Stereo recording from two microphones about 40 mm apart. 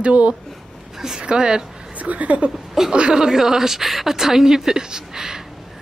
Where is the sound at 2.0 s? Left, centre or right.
Right.